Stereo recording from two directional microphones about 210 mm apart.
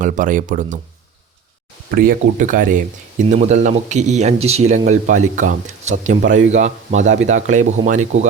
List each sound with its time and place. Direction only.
0.0 s speech: 40° right (ahead or behind)
2.0 s speech: 40° right (ahead or behind)